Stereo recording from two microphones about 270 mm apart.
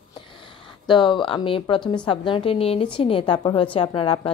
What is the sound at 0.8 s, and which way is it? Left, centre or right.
A woman's voice, centre.